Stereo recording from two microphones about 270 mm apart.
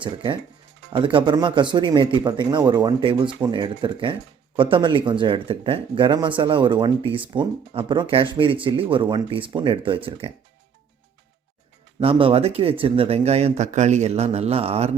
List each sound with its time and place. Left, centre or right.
0.0 s speech: centre
11.9 s speech: centre